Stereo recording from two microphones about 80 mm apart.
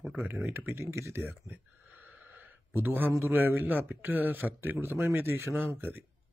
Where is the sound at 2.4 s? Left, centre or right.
Right.